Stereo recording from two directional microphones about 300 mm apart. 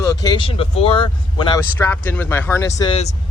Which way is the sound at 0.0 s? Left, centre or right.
Centre.